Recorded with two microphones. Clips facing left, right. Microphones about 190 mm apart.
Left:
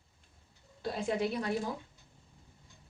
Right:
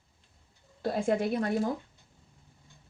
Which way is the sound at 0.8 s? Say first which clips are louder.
Right 5 dB; 50° right (ahead or behind).